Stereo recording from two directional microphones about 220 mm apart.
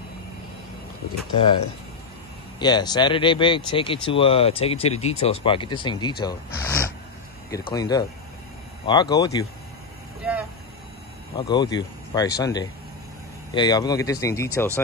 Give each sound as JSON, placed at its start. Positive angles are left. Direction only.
{"t": 2.6, "sound": "speech", "side_deg": 20}
{"t": 10.2, "sound": "vehicle", "side_deg": -5}
{"t": 11.3, "sound": "speech", "side_deg": 20}